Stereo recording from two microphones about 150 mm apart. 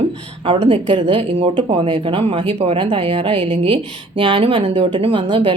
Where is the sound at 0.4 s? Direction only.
35° right (ahead or behind).